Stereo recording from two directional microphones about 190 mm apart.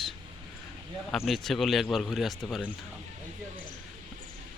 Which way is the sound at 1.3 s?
Centre (ahead or behind).